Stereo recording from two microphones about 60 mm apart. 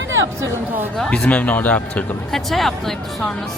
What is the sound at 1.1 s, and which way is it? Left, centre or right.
A man's voice, centre.